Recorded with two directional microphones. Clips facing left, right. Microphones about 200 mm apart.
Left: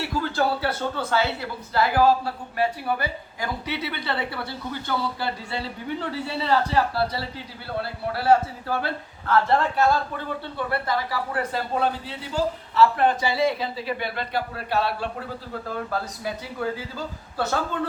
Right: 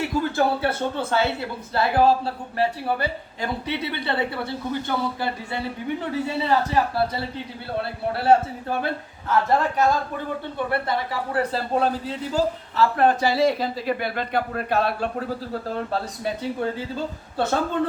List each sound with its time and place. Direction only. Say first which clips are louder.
0.0 s a man's voice: right 3 dB; 20° right (ahead or behind); by 15.1 s 50° right (ahead or behind)
15.6 s speech: left 1 dB; 30° right (ahead or behind)